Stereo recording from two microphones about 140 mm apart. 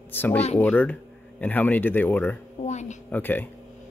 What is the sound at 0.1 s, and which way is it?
Speech, 15° left (ahead or behind).